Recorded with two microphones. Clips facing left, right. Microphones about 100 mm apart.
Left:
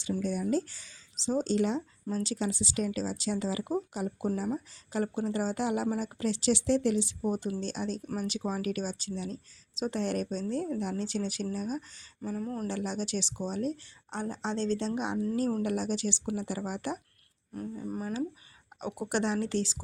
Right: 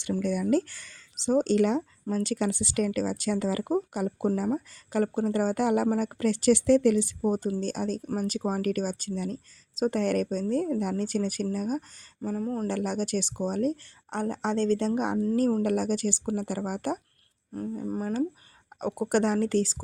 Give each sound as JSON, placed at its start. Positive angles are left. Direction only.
{"t": 0.0, "sound": "speech", "side_deg": -65}
{"t": 7.2, "sound": "speech", "side_deg": -40}
{"t": 12.6, "sound": "speech", "side_deg": -55}
{"t": 18.8, "sound": "speech", "side_deg": -45}